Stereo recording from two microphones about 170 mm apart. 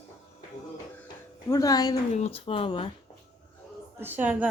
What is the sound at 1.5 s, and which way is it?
Speech, 20° left (ahead or behind).